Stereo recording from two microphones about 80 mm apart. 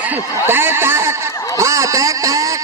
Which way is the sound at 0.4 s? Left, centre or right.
Right.